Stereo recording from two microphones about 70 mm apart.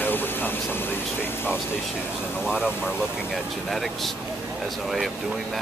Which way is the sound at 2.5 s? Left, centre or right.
Centre.